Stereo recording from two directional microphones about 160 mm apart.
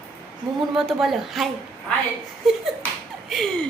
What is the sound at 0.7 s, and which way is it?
Speech, centre (ahead or behind).